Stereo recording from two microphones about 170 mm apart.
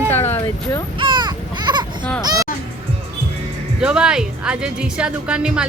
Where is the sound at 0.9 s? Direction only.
30° right (ahead or behind).